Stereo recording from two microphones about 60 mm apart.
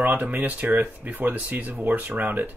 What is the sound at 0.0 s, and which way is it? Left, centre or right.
Speech, right.